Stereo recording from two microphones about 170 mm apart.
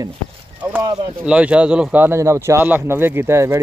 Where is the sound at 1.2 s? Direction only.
5° right (ahead or behind).